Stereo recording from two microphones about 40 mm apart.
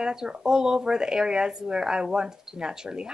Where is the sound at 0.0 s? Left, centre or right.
Centre.